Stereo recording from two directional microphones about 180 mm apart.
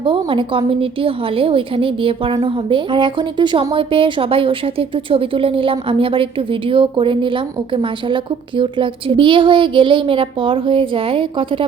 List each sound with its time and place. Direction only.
0.0 s a woman's voice: 30° right (ahead or behind)